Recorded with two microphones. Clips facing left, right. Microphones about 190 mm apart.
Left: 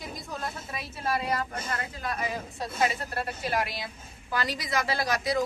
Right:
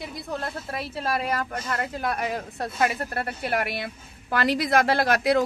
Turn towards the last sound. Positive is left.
turn(degrees=-60)  # may be behind; listen again after turning